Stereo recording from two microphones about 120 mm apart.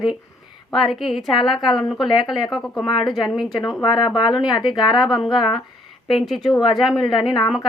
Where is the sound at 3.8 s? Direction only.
35° left (ahead or behind).